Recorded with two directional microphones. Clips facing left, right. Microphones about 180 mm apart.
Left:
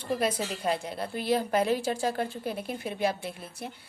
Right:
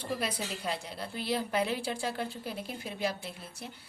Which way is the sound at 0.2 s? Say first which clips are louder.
Left 6 dB; 45° left (ahead or behind).